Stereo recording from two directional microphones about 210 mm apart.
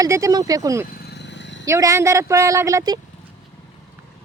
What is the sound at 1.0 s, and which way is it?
Vehicle, 50° left (ahead or behind).